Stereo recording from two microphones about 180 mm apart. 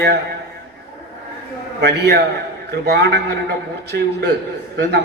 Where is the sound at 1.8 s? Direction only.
70° right (ahead or behind).